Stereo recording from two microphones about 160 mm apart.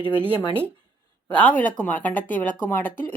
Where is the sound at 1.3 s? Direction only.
10° left (ahead or behind).